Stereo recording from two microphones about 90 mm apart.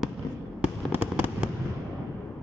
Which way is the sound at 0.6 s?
20° right (ahead or behind).